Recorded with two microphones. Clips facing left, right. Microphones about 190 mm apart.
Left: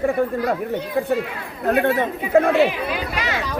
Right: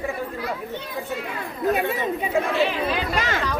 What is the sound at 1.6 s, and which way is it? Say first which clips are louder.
Speech: left 4 dB; 60° left (ahead or behind).